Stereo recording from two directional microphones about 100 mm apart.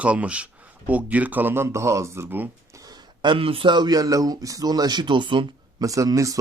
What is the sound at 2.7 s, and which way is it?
Speech, 40° right (ahead or behind).